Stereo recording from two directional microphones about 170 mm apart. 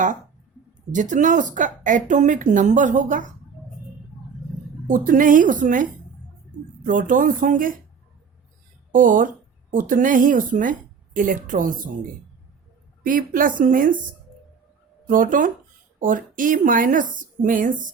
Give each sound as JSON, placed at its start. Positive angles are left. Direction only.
{"t": 0.9, "sound": "speech", "side_deg": -45}
{"t": 4.9, "sound": "speech", "side_deg": -50}
{"t": 8.9, "sound": "speech", "side_deg": -50}
{"t": 13.0, "sound": "speech", "side_deg": -55}
{"t": 15.0, "sound": "speech", "side_deg": -55}